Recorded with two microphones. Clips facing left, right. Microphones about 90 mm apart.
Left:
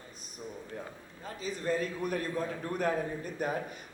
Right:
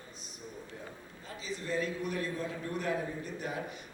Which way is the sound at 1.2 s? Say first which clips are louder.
Left 5 dB; 45° left (ahead or behind).